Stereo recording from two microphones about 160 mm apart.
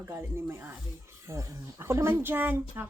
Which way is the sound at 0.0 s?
15° right (ahead or behind).